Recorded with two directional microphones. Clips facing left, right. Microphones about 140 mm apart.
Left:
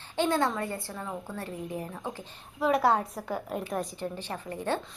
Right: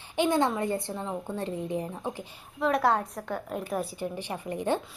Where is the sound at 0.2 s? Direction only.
15° right (ahead or behind).